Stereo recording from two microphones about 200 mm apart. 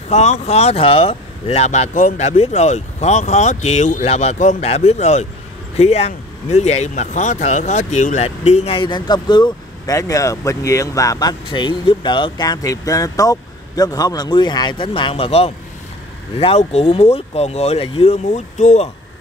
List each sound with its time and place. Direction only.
0.1 s speech: 35° left (ahead or behind)